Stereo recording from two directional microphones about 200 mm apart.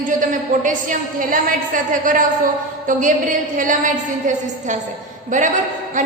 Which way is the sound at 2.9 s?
40° right (ahead or behind).